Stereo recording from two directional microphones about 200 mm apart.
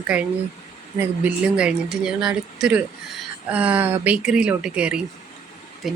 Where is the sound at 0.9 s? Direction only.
5° right (ahead or behind).